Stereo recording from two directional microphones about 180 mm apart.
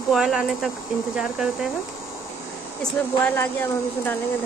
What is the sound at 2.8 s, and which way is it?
Speech, 10° left (ahead or behind).